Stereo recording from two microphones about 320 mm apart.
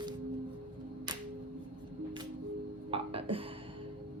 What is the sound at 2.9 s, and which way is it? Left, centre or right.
Music, centre.